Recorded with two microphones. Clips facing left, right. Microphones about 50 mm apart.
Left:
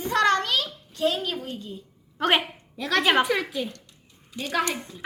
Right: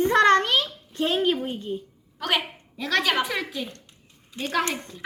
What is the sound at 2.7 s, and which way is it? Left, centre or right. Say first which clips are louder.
Speech: even; centre.